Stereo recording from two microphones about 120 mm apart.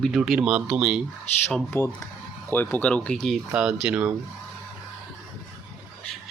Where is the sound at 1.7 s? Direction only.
20° left (ahead or behind); by 4.1 s 10° right (ahead or behind).